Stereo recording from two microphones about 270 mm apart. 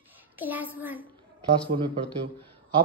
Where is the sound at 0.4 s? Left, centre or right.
Centre.